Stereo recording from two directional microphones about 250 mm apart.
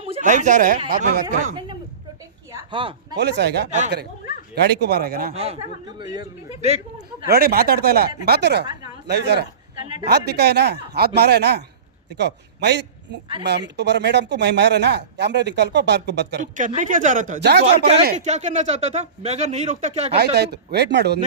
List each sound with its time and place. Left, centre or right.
0.0 s speech: right
2.5 s a sound: centre
3.2 s speech: right
5.3 s a man's voice: right
7.3 s speech: right
16.4 s speech: right
17.7 s speech: right
20.1 s speech: right